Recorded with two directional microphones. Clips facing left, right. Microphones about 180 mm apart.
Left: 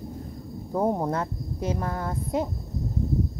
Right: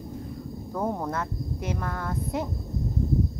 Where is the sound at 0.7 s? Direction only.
30° left (ahead or behind).